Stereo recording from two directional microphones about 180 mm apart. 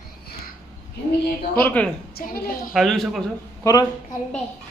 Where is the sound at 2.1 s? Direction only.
55° left (ahead or behind).